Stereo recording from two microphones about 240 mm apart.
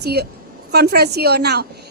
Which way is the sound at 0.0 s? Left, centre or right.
Right.